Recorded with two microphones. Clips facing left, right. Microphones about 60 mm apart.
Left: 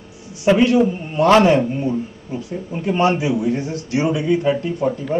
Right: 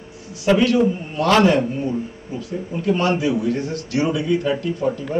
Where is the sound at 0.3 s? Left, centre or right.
Left.